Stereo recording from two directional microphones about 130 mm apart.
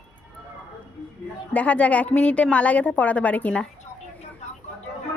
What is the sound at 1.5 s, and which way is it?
A woman's voice, 10° left (ahead or behind).